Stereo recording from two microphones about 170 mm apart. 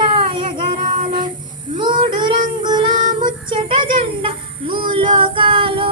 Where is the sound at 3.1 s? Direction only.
30° right (ahead or behind).